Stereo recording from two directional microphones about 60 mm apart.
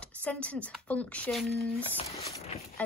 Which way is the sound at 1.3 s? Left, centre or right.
Centre.